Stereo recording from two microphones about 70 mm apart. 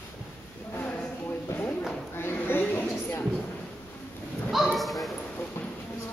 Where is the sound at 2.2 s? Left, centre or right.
Left.